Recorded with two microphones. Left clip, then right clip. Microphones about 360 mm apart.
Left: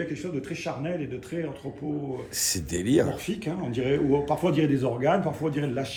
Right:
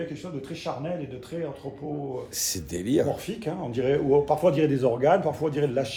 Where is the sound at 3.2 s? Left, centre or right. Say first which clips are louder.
Even; right.